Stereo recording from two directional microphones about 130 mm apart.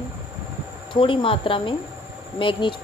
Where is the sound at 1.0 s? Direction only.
45° left (ahead or behind).